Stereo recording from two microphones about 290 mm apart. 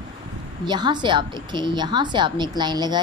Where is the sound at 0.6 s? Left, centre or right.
Centre.